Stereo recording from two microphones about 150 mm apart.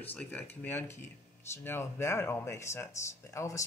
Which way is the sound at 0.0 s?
10° left (ahead or behind).